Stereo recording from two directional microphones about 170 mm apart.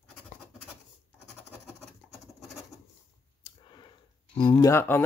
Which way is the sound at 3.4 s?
25° left (ahead or behind).